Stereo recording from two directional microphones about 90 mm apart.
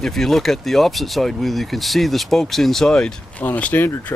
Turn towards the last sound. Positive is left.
turn(degrees=20)  # may be behind; listen again after turning